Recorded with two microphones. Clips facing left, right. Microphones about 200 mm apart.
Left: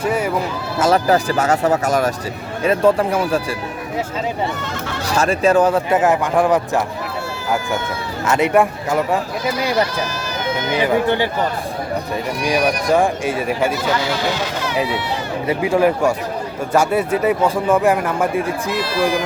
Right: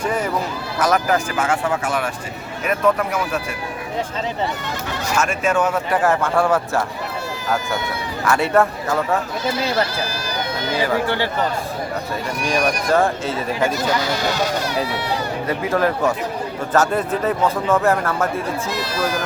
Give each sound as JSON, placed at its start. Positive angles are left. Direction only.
{"t": 0.0, "sound": "speech", "side_deg": 10}
{"t": 0.8, "sound": "speech", "side_deg": 30}
{"t": 2.6, "sound": "speech", "side_deg": 30}
{"t": 5.0, "sound": "speech", "side_deg": 35}
{"t": 6.0, "sound": "speech", "side_deg": 15}
{"t": 8.2, "sound": "speech", "side_deg": 20}
{"t": 9.5, "sound": "speech", "side_deg": -30}
{"t": 10.8, "sound": "speech", "side_deg": 20}
{"t": 12.5, "sound": "speech", "side_deg": 15}
{"t": 14.0, "sound": "speech", "side_deg": -40}
{"t": 15.4, "sound": "speech", "side_deg": 15}